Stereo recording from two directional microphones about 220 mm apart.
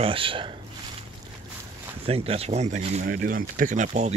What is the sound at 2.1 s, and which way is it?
Speech, 25° right (ahead or behind).